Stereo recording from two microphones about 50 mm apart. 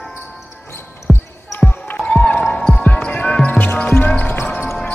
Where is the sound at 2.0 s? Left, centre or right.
Left.